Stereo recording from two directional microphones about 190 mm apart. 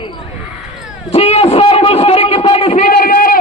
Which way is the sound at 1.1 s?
35° left (ahead or behind).